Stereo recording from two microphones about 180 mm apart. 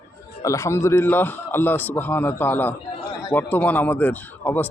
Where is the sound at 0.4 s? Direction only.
15° left (ahead or behind).